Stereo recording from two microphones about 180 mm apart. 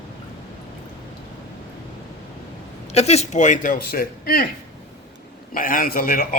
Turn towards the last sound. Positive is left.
turn(degrees=55)  # may be behind; listen again after turning